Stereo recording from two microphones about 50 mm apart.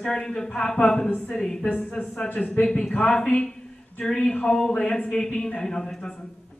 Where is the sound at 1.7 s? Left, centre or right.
Left.